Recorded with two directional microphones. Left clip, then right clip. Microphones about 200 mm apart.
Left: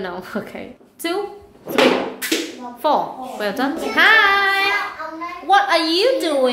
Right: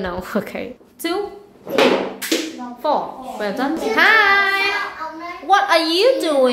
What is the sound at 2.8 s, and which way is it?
Speech, 15° left (ahead or behind).